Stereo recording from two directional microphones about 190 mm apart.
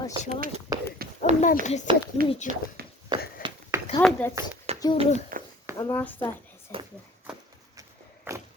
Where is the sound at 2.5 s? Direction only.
45° left (ahead or behind).